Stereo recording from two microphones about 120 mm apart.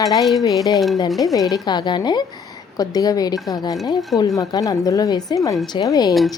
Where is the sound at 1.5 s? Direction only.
35° left (ahead or behind).